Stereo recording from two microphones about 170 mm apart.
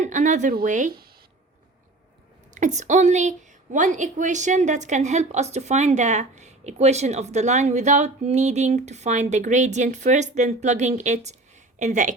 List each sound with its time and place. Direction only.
0.0 s a woman's voice: 45° right (ahead or behind)
2.6 s a woman's voice: 45° right (ahead or behind)